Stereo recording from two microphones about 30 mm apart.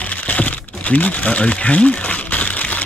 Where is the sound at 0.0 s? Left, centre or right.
Left.